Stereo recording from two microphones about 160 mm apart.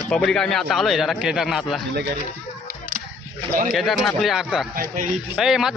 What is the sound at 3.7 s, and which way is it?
Speech, centre (ahead or behind).